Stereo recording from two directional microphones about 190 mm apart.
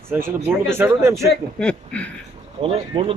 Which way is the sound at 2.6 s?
30° right (ahead or behind).